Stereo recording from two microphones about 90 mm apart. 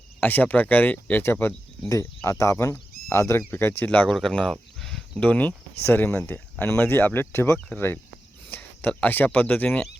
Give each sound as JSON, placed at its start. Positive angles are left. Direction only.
{"t": 0.2, "sound": "speech", "side_deg": 20}
{"t": 4.1, "sound": "speech", "side_deg": 10}
{"t": 4.8, "sound": "cricket", "side_deg": 5}
{"t": 5.2, "sound": "speech", "side_deg": 15}